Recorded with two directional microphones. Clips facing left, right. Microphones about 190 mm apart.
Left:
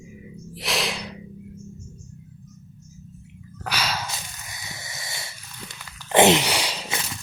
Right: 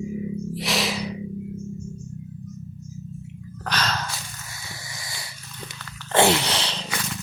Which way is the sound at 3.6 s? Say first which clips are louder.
Right 1 dB; 10° left (ahead or behind).